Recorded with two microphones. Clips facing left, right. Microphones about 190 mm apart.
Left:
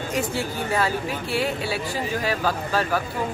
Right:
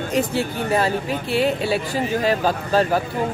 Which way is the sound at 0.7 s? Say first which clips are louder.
Right 4 dB; 20° right (ahead or behind).